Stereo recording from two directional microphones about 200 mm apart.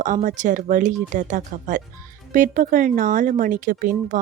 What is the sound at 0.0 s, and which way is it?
Speech, 40° right (ahead or behind).